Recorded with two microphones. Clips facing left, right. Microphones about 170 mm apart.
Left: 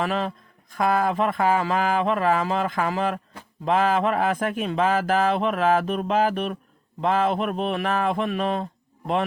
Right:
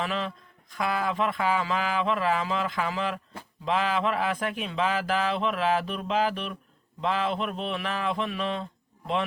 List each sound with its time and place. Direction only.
0.0 s a man's voice: 45° left (ahead or behind)